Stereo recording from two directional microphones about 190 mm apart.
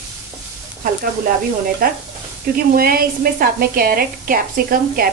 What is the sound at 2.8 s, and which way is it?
A woman's voice, 50° right (ahead or behind).